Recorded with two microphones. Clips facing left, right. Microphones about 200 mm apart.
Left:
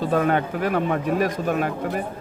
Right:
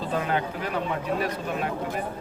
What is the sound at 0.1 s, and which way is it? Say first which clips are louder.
Speech: left 5 dB; 55° left (ahead or behind).